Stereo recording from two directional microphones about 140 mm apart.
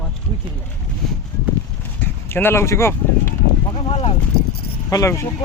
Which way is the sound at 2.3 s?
15° left (ahead or behind).